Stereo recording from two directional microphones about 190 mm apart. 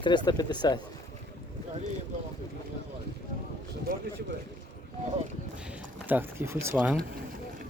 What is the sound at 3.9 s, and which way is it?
Speech, 45° right (ahead or behind).